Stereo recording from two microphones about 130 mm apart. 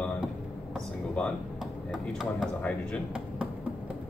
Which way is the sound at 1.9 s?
5° right (ahead or behind).